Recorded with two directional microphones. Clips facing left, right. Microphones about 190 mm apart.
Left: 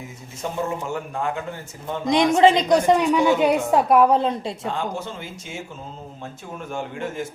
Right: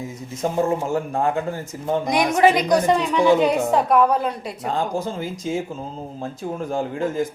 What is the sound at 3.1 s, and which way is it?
Speech, 5° left (ahead or behind).